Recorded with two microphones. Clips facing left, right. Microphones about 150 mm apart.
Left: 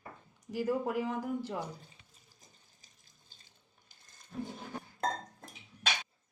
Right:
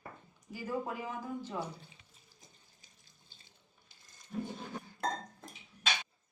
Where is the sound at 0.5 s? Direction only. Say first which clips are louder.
Left 6 dB; 80° left.